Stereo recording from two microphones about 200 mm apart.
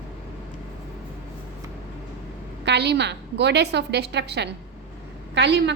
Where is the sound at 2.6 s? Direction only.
55° right (ahead or behind).